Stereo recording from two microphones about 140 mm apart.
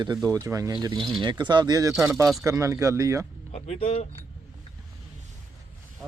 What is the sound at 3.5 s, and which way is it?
Speech, 55° left (ahead or behind).